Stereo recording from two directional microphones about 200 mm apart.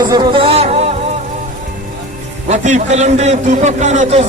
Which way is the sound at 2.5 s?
35° right (ahead or behind).